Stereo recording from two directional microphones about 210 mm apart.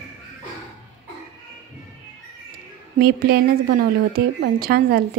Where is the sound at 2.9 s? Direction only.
45° right (ahead or behind).